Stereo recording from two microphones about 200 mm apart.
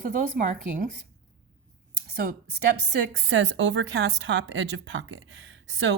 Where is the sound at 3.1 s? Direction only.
65° right (ahead or behind).